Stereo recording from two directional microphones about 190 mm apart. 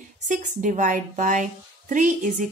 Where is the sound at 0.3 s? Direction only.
45° right (ahead or behind).